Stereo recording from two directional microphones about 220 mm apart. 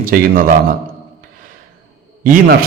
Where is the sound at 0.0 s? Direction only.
40° right (ahead or behind).